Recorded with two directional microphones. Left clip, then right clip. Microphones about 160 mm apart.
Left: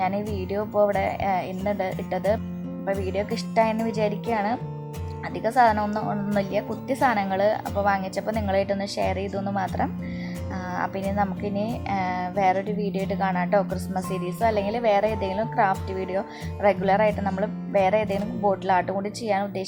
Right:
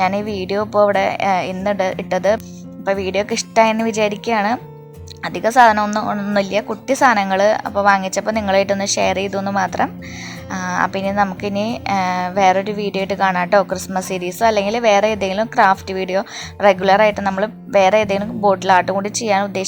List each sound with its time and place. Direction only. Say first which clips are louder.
0.0 s a woman's voice: right 8 dB; 20° right (ahead or behind)